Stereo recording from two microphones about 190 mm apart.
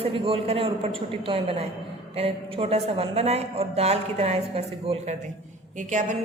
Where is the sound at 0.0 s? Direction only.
30° right (ahead or behind).